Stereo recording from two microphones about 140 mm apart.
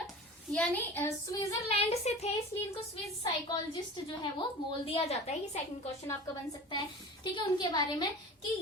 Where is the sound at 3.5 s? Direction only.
35° left (ahead or behind); by 5.9 s 50° left (ahead or behind).